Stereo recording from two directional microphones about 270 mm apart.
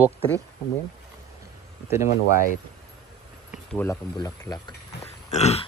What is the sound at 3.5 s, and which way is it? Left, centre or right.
Speech, centre.